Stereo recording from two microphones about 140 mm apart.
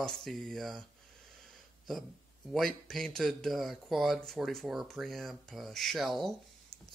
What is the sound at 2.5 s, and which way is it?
Speech, centre (ahead or behind).